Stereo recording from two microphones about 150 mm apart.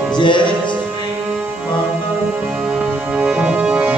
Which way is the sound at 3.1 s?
5° right (ahead or behind).